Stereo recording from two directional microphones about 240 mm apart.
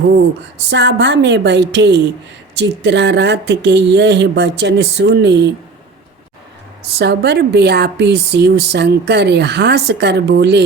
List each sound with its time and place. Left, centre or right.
0.7 s speech: right
7.0 s speech: right